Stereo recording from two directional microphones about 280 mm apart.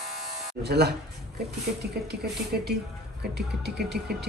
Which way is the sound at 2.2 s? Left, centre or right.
Right.